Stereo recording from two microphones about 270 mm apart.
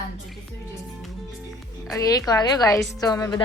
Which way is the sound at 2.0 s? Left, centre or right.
Centre.